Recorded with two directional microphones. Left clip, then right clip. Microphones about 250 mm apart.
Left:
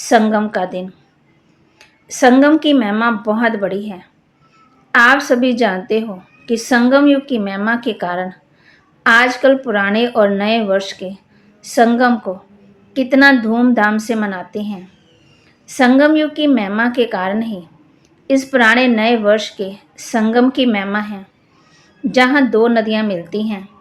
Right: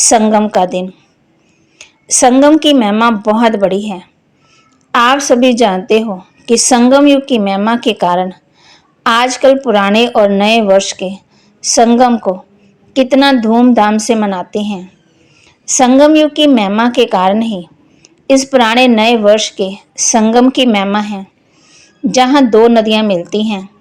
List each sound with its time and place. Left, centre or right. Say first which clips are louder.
0.0 s a woman's voice: right 4 dB; right